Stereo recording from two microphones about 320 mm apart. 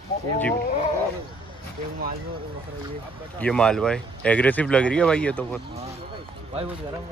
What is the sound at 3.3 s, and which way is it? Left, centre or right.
Speech, centre.